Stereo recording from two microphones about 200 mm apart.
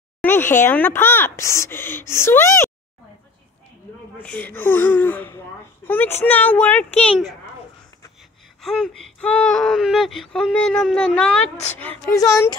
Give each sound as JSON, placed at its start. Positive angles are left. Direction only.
{"t": 0.2, "sound": "speech", "side_deg": 10}
{"t": 4.2, "sound": "speech", "side_deg": 10}
{"t": 8.5, "sound": "speech", "side_deg": 0}